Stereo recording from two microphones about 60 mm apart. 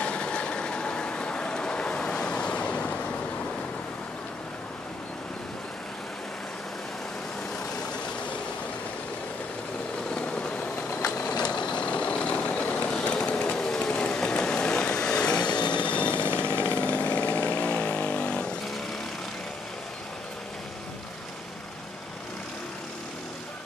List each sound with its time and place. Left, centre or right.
0.0 s vehicle: centre
10.1 s vehicle: centre
16.3 s chainsaw: left